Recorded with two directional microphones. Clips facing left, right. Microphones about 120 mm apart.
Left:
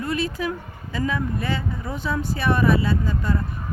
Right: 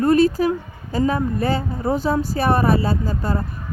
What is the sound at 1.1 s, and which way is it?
Speech, 40° right (ahead or behind).